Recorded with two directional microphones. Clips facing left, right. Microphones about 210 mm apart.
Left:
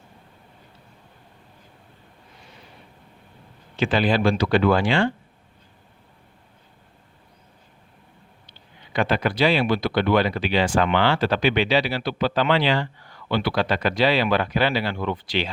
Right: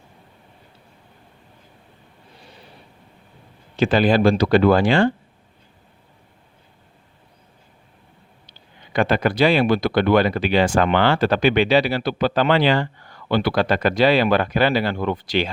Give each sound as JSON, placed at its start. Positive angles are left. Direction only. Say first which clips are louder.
{"t": 3.8, "sound": "speech", "louder": "right 4 dB", "side_deg": -40}
{"t": 8.4, "sound": "speech", "louder": "right 1 dB", "side_deg": -45}